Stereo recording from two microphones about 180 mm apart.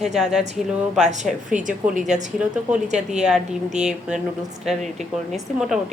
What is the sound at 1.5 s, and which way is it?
Speech, 45° right (ahead or behind).